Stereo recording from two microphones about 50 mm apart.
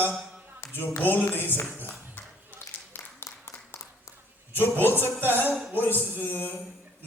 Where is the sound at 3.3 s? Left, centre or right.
Left.